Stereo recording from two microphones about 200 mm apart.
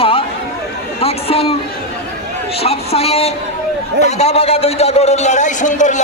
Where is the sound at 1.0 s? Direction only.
30° left (ahead or behind).